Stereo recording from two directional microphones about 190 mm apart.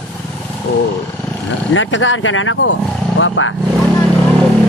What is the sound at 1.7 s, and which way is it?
Speech, 85° left.